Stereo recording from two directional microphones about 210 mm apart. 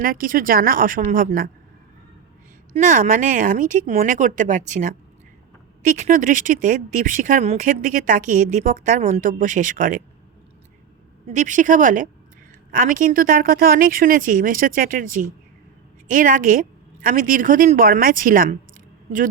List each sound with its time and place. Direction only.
0.0 s speech: 40° right (ahead or behind)
2.7 s speech: 35° right (ahead or behind)
11.3 s speech: 35° right (ahead or behind)